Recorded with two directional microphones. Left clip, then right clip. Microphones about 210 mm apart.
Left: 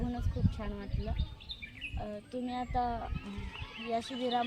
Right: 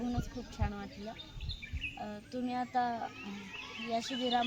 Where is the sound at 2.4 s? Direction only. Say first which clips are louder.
Right 1 dB; 15° left (ahead or behind).